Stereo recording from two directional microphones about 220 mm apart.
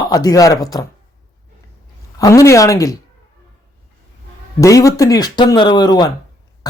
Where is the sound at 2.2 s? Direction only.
15° left (ahead or behind).